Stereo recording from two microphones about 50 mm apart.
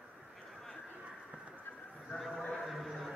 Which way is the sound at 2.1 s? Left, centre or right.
Centre.